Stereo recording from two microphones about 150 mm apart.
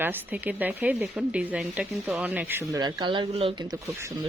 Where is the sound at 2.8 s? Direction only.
30° right (ahead or behind).